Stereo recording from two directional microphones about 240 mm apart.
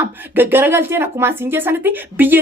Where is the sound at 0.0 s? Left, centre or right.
Centre.